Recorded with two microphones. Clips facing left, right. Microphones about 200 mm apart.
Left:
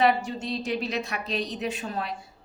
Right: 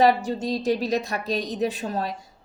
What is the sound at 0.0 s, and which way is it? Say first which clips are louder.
A woman's voice: right 4 dB; 40° right (ahead or behind).